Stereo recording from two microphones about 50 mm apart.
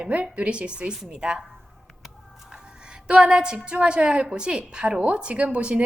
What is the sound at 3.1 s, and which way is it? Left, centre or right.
A woman's voice, centre.